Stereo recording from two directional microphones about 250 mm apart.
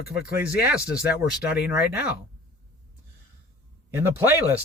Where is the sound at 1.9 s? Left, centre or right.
Left.